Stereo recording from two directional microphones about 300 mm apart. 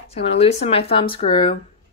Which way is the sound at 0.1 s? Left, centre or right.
Centre.